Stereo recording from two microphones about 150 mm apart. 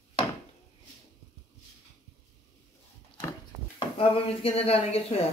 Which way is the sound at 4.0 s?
40° left (ahead or behind).